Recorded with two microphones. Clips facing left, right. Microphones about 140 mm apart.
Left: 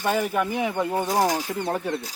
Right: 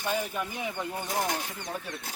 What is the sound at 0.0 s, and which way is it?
Speech, 65° left (ahead or behind).